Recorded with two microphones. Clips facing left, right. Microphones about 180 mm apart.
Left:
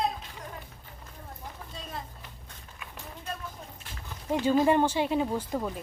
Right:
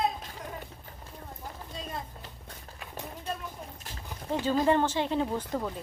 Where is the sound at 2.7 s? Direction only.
35° right (ahead or behind).